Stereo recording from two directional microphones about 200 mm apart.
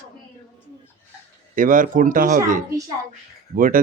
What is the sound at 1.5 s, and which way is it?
Speech, 40° right (ahead or behind).